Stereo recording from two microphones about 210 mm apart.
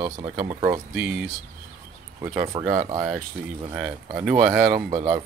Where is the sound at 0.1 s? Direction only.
15° right (ahead or behind).